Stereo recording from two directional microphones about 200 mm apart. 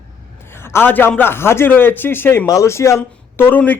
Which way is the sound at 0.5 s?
10° left (ahead or behind).